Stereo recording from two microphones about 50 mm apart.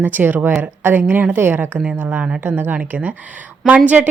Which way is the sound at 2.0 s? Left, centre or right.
Right.